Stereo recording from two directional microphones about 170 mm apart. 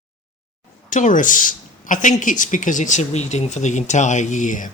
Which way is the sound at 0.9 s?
50° left (ahead or behind).